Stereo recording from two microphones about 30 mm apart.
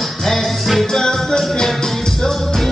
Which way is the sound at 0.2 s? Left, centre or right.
Centre.